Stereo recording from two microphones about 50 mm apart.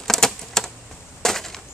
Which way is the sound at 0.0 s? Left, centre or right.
Centre.